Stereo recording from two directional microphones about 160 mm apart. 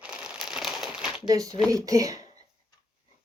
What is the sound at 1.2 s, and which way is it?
Speech, 20° right (ahead or behind).